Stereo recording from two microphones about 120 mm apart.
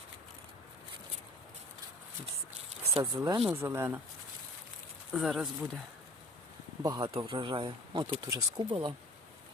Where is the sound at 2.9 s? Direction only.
35° right (ahead or behind).